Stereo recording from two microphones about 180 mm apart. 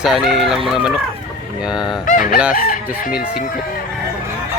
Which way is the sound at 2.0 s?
50° left (ahead or behind).